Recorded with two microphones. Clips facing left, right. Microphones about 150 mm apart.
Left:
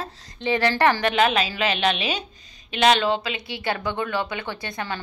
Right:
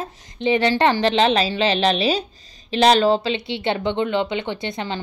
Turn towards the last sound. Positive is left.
turn(degrees=-20)  # may be behind; listen again after turning